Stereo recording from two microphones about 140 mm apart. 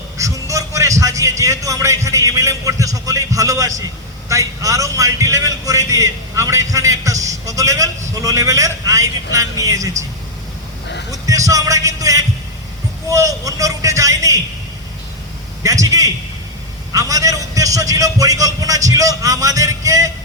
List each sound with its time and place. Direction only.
0.2 s a man's voice: 20° right (ahead or behind)
11.1 s a man's voice: 25° right (ahead or behind)
15.6 s a man's voice: 25° right (ahead or behind)